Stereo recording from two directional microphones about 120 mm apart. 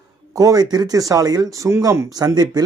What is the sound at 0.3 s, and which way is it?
Speech, 30° right (ahead or behind).